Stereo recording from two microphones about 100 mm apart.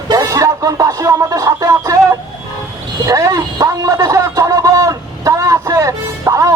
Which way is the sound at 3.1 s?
35° right (ahead or behind).